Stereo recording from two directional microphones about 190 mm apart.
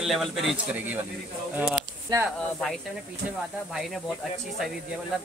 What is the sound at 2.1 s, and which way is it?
Speech, 20° right (ahead or behind).